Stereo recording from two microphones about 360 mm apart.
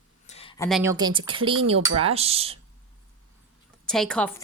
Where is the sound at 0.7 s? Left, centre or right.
Centre.